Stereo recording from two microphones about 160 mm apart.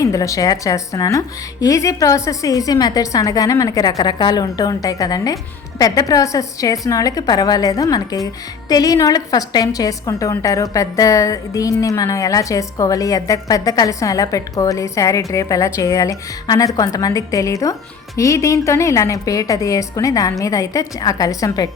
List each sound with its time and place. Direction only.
0.0 s a woman's voice: 20° left (ahead or behind)